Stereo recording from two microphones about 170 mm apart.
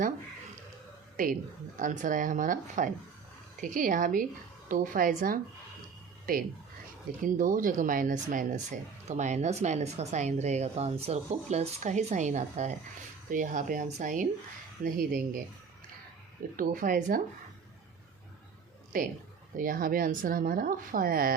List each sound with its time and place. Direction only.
1.1 s speech: 55° right (ahead or behind)
16.6 s speech: 55° right (ahead or behind)
19.5 s speech: 55° right (ahead or behind)